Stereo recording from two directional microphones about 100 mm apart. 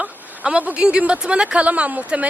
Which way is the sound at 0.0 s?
10° right (ahead or behind).